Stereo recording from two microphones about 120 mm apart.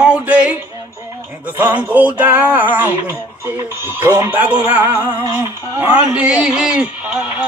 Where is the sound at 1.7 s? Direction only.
10° right (ahead or behind).